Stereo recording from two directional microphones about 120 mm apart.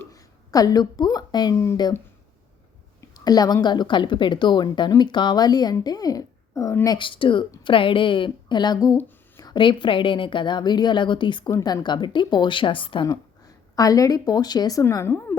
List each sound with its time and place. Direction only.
0.1 s a woman's voice: 30° left (ahead or behind)
3.2 s a woman's voice: 35° left (ahead or behind)
6.9 s a woman's voice: 45° left (ahead or behind)
9.4 s a sound: 40° left (ahead or behind)
9.8 s a woman's voice: 45° left (ahead or behind)
13.7 s a woman's voice: 30° left (ahead or behind)